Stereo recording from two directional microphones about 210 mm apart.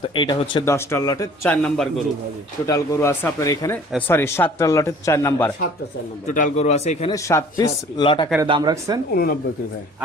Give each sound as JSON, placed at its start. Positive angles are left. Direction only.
{"t": 0.0, "sound": "a man's voice", "side_deg": 20}
{"t": 1.5, "sound": "a man's voice", "side_deg": 5}
{"t": 2.6, "sound": "a man's voice", "side_deg": 15}
{"t": 6.2, "sound": "a man's voice", "side_deg": 35}
{"t": 7.1, "sound": "speech", "side_deg": 15}
{"t": 8.4, "sound": "speech", "side_deg": -20}